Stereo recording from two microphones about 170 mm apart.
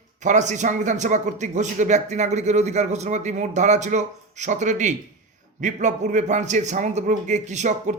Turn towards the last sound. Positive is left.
turn(degrees=-45)  # may be behind; listen again after turning